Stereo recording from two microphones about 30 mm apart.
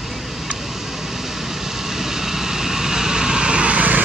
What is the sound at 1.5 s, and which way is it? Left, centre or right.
Vehicle, centre.